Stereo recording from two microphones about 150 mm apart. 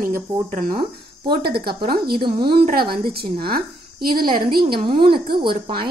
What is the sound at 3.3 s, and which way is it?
Speech, 35° right (ahead or behind).